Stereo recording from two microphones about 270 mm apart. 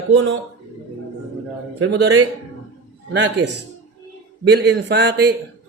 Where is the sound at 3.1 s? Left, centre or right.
Right.